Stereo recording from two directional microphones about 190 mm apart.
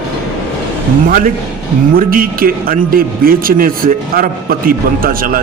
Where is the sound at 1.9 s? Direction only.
50° right (ahead or behind).